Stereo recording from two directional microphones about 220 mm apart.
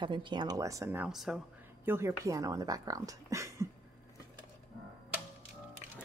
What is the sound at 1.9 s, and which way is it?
A woman's voice, 15° right (ahead or behind).